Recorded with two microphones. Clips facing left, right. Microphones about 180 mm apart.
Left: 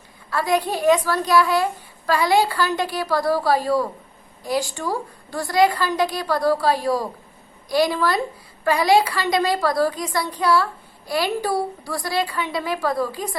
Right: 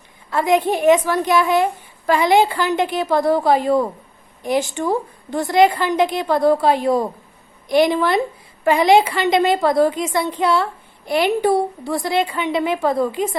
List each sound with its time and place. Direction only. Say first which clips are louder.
0.3 s a woman's voice: right 4 dB; 20° right (ahead or behind)